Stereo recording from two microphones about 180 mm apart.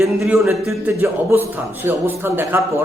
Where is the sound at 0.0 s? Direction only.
15° right (ahead or behind).